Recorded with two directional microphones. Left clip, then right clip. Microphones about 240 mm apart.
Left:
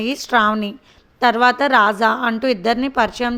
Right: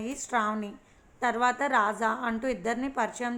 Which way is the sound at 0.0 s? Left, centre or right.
Left.